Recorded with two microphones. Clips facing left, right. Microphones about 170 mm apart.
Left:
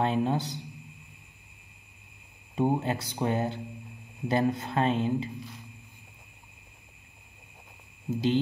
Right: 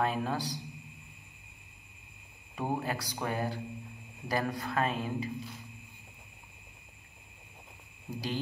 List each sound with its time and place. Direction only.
0.0 s speech: 25° left (ahead or behind)
2.5 s speech: 20° left (ahead or behind)
8.1 s speech: 25° left (ahead or behind)